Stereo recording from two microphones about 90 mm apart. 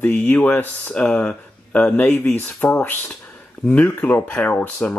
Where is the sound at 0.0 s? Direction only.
20° left (ahead or behind).